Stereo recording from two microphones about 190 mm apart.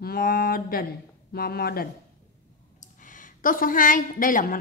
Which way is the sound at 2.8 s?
45° left (ahead or behind).